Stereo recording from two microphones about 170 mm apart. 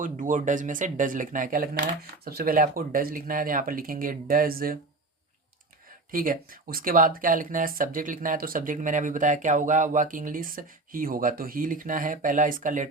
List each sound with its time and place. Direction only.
0.0 s speech: 50° right (ahead or behind)
1.8 s speech: 65° right (ahead or behind)
6.1 s speech: 55° right (ahead or behind)